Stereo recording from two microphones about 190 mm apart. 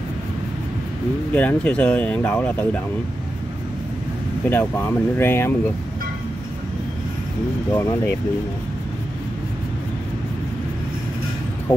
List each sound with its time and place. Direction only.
1.3 s speech: 5° left (ahead or behind)
4.5 s speech: 10° left (ahead or behind)
7.7 s speech: 15° left (ahead or behind)